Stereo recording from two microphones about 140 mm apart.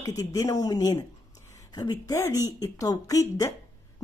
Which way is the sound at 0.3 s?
25° left (ahead or behind).